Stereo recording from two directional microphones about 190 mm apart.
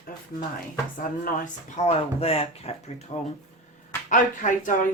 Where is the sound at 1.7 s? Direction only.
35° left (ahead or behind).